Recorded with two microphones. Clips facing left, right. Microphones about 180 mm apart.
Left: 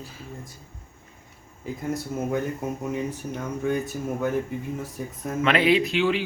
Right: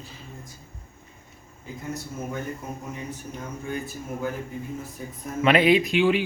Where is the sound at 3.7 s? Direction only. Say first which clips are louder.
Left 6 dB; 70° left (ahead or behind).